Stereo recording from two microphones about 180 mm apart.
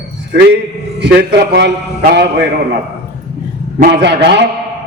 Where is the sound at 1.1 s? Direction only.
65° right (ahead or behind).